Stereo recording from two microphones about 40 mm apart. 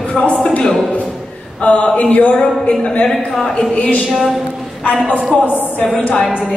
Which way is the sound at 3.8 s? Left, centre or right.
Left.